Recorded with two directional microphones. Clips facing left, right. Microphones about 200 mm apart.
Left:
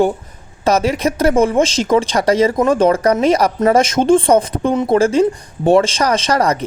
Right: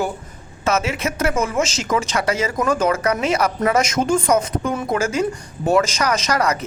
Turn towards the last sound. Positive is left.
turn(degrees=30)  # may be behind; listen again after turning